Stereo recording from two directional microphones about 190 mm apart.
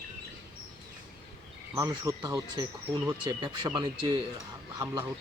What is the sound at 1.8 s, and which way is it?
Speech, 15° right (ahead or behind).